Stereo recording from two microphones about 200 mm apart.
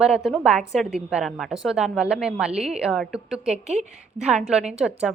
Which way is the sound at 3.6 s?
35° right (ahead or behind).